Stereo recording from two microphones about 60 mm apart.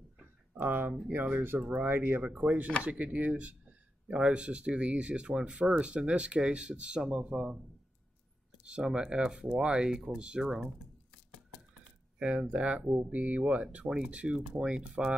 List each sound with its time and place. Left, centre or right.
0.6 s speech: right; by 7.5 s centre
8.6 s speech: centre
12.2 s speech: centre